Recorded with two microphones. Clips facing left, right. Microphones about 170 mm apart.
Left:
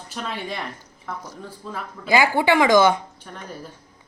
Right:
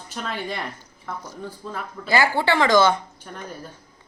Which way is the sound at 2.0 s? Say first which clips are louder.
Left 2 dB; 15° left (ahead or behind).